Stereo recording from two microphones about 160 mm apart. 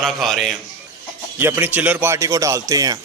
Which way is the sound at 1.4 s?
15° right (ahead or behind).